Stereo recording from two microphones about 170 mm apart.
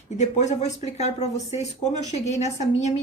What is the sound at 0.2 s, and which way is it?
Speech, 40° left (ahead or behind).